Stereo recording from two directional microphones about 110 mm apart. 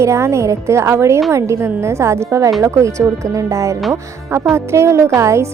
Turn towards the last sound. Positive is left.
turn(degrees=-25)  # may be behind; listen again after turning